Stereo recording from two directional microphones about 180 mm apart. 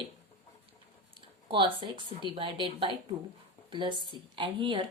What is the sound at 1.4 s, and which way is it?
A woman's voice, 30° right (ahead or behind).